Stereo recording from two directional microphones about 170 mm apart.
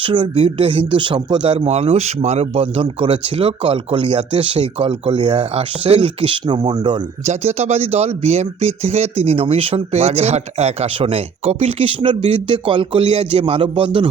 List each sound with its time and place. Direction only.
0.0 s speech: 30° right (ahead or behind)
7.3 s speech: 40° right (ahead or behind)